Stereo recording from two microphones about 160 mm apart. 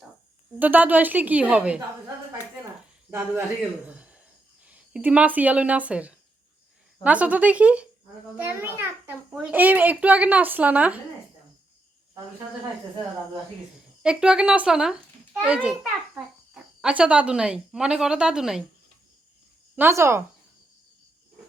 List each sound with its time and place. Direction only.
0.6 s a child's voice: 10° right (ahead or behind)
3.8 s a sound: 10° right (ahead or behind)
4.6 s a child's voice: 10° right (ahead or behind)
14.0 s a child's voice: 5° right (ahead or behind)
19.7 s a child's voice: 15° right (ahead or behind)